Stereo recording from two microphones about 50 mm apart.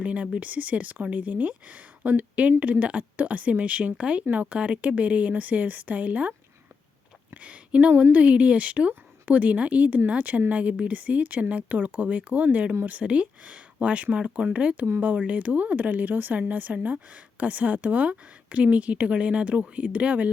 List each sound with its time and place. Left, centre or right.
0.0 s speech: right
7.4 s a woman's voice: right